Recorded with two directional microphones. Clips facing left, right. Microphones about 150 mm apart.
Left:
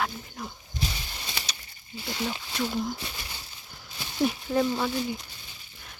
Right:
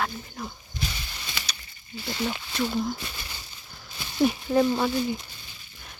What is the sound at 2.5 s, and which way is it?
Speech, 15° left (ahead or behind).